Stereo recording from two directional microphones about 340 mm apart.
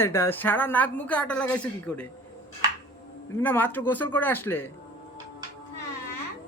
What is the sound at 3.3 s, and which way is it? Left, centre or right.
A woman's voice, centre.